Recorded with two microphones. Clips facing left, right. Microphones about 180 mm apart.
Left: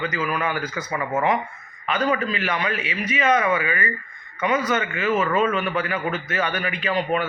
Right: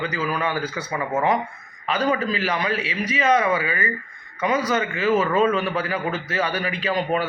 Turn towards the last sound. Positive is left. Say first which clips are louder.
# even
turn(degrees=-35)  # may be behind; listen again after turning